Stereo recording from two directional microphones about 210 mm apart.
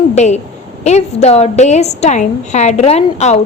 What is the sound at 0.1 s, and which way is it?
A woman's voice, 35° left (ahead or behind).